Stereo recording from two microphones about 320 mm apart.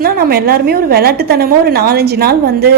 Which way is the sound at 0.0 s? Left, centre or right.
Right.